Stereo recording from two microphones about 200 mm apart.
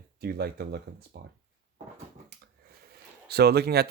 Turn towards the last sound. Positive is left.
turn(degrees=-55)  # may be behind; listen again after turning